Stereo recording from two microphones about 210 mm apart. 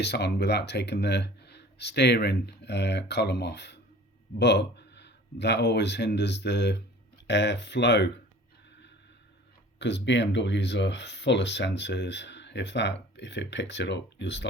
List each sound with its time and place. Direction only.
0.0 s speech: 50° left (ahead or behind)
9.7 s speech: 55° left (ahead or behind)